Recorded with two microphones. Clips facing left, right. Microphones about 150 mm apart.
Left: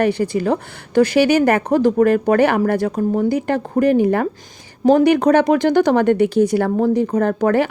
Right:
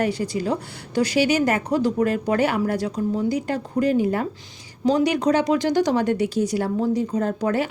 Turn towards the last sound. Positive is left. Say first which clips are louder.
# left 6 dB
turn(degrees=60)  # may be behind; listen again after turning